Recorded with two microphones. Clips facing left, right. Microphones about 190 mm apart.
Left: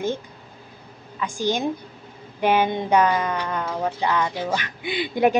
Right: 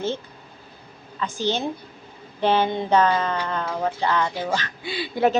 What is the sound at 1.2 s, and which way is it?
Speech, 10° left (ahead or behind).